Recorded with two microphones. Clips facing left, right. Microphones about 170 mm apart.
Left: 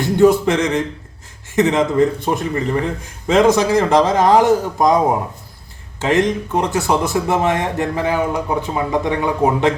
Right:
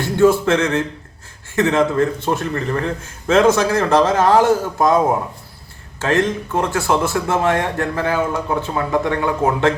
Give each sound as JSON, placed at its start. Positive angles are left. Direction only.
{"t": 0.0, "sound": "speech", "side_deg": 20}